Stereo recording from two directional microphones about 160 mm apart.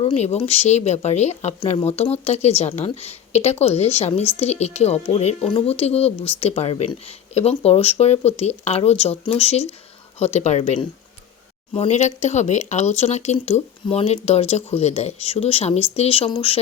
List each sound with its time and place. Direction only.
0.0 s speech: 40° left (ahead or behind)